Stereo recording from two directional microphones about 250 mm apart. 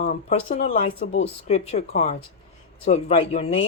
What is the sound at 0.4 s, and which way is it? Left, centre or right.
Speech, left.